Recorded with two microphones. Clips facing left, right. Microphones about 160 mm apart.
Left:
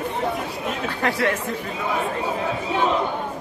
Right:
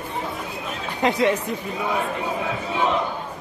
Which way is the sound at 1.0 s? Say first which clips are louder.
Right 3 dB; 20° right (ahead or behind).